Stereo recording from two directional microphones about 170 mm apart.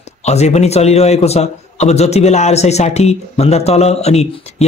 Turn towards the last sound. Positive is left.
turn(degrees=40)  # may be behind; listen again after turning